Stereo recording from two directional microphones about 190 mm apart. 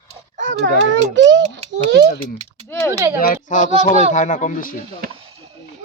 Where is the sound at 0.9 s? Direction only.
75° right (ahead or behind).